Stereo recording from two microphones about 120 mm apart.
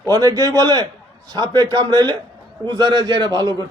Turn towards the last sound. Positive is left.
turn(degrees=-35)  # may be behind; listen again after turning